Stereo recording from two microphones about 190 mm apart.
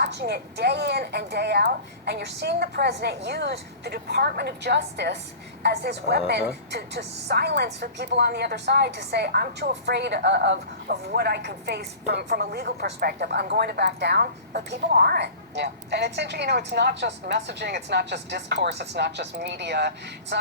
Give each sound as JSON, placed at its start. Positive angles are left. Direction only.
{"t": 0.0, "sound": "a woman's voice", "side_deg": -60}
{"t": 20.3, "sound": "vehicle", "side_deg": -65}